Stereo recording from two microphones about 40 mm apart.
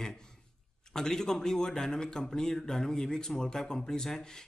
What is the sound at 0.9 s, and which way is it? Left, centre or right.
Speech, centre.